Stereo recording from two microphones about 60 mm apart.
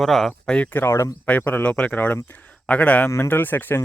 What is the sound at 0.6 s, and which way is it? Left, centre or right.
Speech, left.